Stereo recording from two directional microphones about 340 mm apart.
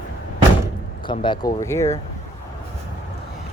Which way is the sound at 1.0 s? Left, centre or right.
Centre.